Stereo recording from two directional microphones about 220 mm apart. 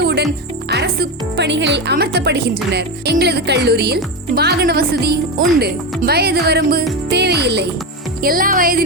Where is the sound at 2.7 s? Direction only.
45° right (ahead or behind).